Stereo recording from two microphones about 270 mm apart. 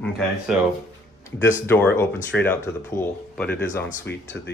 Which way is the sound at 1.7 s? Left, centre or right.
Centre.